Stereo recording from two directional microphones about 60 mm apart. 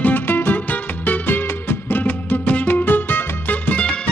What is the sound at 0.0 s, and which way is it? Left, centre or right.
Music, left.